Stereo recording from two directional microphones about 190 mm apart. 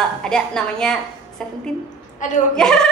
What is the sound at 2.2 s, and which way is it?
Speech, 40° left (ahead or behind).